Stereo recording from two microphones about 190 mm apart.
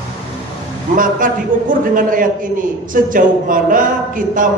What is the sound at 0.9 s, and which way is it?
A man's voice, 45° right (ahead or behind).